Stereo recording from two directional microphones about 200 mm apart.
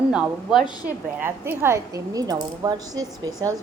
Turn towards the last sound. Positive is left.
turn(degrees=-20)  # may be behind; listen again after turning